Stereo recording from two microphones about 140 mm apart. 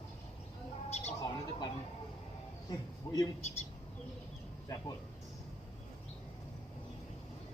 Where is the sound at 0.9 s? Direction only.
55° left (ahead or behind).